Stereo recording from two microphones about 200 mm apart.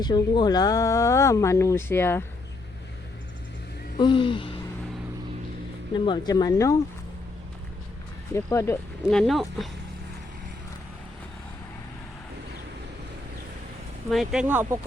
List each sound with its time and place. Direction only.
0.0 s speech: 20° left (ahead or behind)
4.0 s a sound: 25° left (ahead or behind)
6.1 s speech: 20° left (ahead or behind)
8.3 s speech: 15° left (ahead or behind)
9.0 s speech: centre (ahead or behind)
14.1 s speech: centre (ahead or behind)